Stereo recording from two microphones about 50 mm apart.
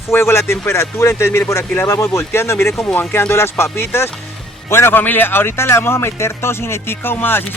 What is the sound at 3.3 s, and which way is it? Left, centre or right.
Speech, left.